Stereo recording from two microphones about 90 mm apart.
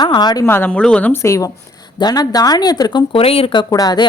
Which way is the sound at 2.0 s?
45° left (ahead or behind).